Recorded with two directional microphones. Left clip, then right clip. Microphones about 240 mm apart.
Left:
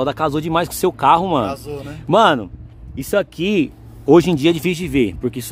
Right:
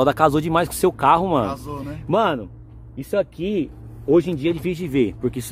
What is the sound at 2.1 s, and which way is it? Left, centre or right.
A man's voice, centre.